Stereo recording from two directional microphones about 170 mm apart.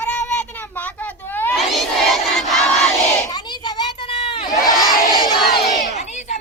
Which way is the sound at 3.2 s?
25° left (ahead or behind).